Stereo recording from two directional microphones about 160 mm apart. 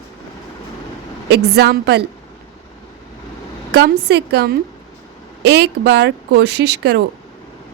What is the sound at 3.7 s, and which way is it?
Speech, 90° right.